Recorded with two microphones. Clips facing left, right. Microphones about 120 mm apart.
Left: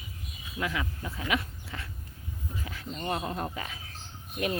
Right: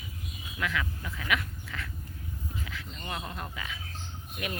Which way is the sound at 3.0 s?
35° left (ahead or behind).